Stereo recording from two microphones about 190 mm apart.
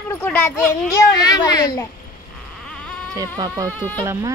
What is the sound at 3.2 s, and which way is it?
Speech, 20° right (ahead or behind).